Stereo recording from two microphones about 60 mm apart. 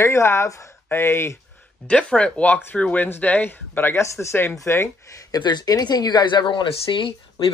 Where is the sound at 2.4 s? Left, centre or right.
Left.